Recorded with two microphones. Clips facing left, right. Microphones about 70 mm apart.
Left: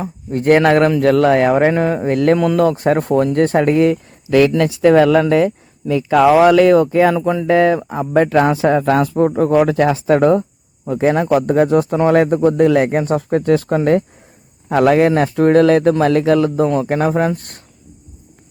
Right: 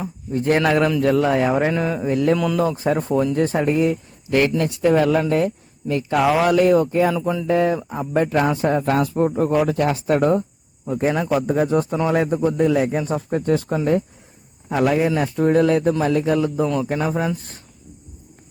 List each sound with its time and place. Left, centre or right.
0.3 s a man's voice: left
4.5 s speech: left
7.4 s speech: left
10.8 s a man's voice: left
11.1 s speech: left
11.4 s a man's voice: left
16.6 s speech: left